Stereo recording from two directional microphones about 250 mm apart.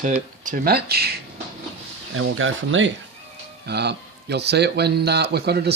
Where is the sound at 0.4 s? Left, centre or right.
Right.